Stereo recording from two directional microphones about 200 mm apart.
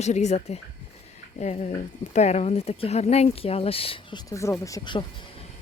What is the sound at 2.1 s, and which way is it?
Speech, 35° left (ahead or behind).